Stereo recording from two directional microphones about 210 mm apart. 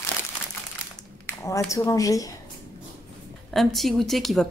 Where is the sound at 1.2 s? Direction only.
15° left (ahead or behind).